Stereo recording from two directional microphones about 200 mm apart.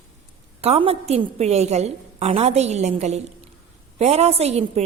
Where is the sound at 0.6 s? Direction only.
30° right (ahead or behind).